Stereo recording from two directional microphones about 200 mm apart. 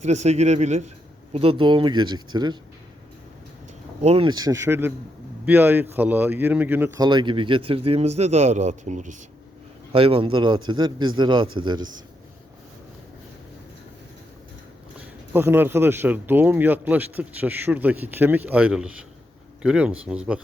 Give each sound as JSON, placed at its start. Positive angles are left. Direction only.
{"t": 0.0, "sound": "speech", "side_deg": -35}
{"t": 4.0, "sound": "speech", "side_deg": -30}
{"t": 9.9, "sound": "speech", "side_deg": -25}
{"t": 15.3, "sound": "speech", "side_deg": -10}